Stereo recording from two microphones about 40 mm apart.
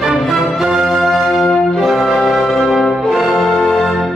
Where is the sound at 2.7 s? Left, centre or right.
Centre.